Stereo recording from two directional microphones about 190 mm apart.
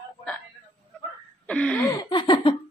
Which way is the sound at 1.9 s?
20° left (ahead or behind).